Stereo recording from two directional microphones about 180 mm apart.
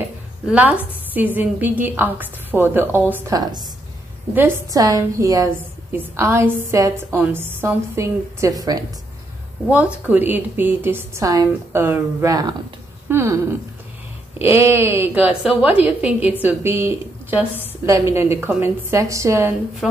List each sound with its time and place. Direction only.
0.5 s a woman's voice: 10° right (ahead or behind)
9.7 s a woman's voice: 5° right (ahead or behind)
14.4 s a woman's voice: 15° right (ahead or behind)
16.0 s a woman's voice: 35° left (ahead or behind)
16.3 s a woman's voice: 10° right (ahead or behind)
19.8 s a woman's voice: centre (ahead or behind)